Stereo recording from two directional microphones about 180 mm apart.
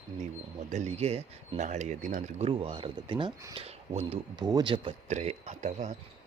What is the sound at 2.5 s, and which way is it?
Speech, 30° right (ahead or behind).